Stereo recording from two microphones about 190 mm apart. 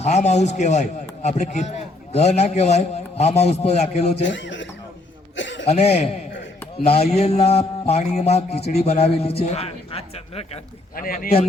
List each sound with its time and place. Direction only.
0.0 s a man's voice: 35° left (ahead or behind)
4.2 s speech: 70° left (ahead or behind)
5.4 s a sound: 75° left (ahead or behind)
5.6 s a man's voice: 35° left (ahead or behind)
10.9 s speech: 50° left (ahead or behind)